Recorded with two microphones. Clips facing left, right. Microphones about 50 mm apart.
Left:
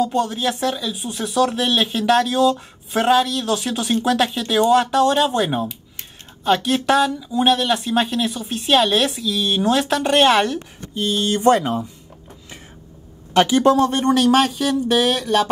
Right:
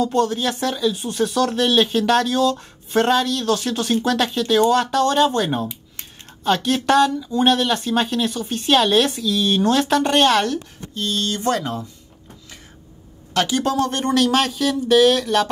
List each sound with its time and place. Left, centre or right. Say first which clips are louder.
0.0 s speech: right 1 dB; centre
10.2 s speech: left 1 dB; centre
13.3 s speech: left 6 dB; left